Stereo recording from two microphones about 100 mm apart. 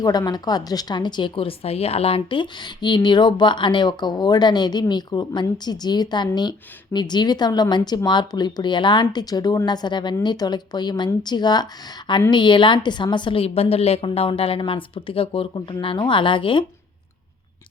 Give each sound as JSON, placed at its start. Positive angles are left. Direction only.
{"t": 0.0, "sound": "a woman's voice", "side_deg": 40}